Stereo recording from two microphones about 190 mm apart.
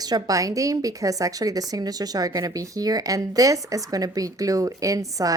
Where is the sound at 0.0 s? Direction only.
20° right (ahead or behind).